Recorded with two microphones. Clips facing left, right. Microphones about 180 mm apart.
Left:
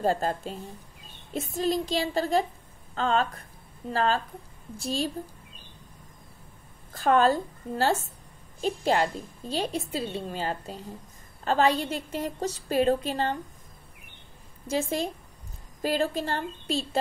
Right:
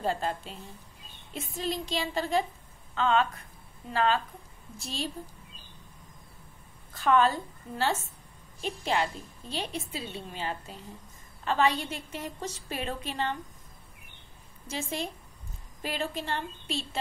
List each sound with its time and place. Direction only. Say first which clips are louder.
0.0 s a woman's voice: left 5 dB; 40° left (ahead or behind)
6.9 s a woman's voice: left 3 dB; 40° left (ahead or behind)
14.7 s a woman's voice: left 7 dB; 35° left (ahead or behind)